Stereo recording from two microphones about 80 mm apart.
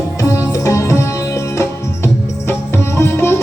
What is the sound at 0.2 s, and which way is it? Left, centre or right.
Music, left.